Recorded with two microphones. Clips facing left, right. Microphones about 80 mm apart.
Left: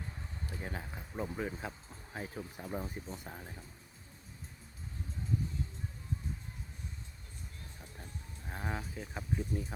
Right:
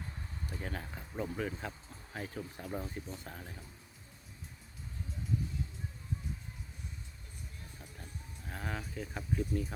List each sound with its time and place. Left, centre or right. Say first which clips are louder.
0.5 s speech: right 1 dB; centre
8.4 s speech: left 1 dB; centre